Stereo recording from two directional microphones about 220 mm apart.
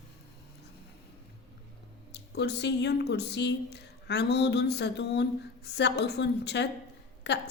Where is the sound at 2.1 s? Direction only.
50° left (ahead or behind).